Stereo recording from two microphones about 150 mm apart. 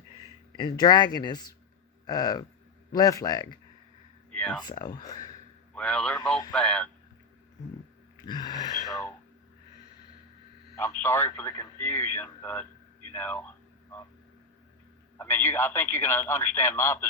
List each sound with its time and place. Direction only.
0.5 s speech: 30° left (ahead or behind)
4.6 s speech: 25° left (ahead or behind)
5.7 s speech: 5° left (ahead or behind)
8.3 s speech: 30° left (ahead or behind)
8.9 s a sound: 15° left (ahead or behind)
10.8 s speech: 15° left (ahead or behind)
15.2 s speech: 15° left (ahead or behind)